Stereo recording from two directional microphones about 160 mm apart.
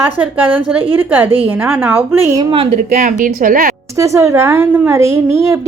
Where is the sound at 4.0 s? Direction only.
20° right (ahead or behind).